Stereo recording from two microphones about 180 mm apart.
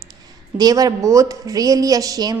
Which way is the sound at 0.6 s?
20° right (ahead or behind).